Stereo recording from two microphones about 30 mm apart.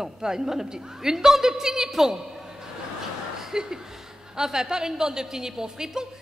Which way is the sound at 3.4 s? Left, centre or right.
Centre.